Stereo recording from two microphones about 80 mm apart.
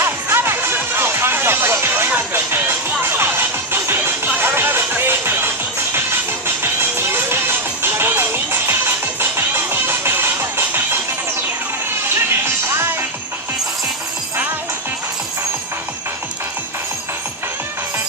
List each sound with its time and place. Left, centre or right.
0.0 s music: right
12.1 s music: right